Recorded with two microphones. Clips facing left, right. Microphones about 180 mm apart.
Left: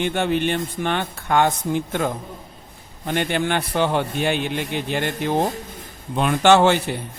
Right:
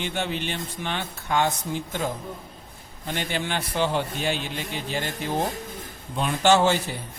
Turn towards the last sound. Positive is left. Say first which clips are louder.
# left 5 dB
turn(degrees=65)  # may be behind; listen again after turning